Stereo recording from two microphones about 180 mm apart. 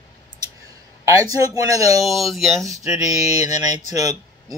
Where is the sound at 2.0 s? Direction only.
Centre (ahead or behind).